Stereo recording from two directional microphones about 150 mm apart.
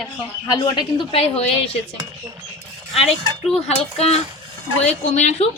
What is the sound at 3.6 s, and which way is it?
A woman's voice, 45° left (ahead or behind).